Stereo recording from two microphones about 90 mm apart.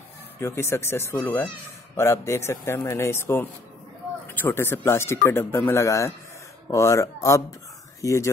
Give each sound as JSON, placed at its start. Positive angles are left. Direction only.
{"t": 0.4, "sound": "speech", "side_deg": 30}